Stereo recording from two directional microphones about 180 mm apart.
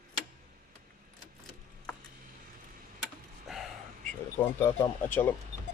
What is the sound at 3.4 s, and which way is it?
Gasp, centre (ahead or behind).